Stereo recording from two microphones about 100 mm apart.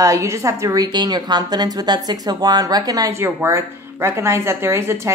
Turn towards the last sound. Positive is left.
turn(degrees=-30)  # may be behind; listen again after turning